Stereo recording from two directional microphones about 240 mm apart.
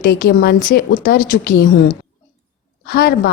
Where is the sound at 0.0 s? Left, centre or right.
Left.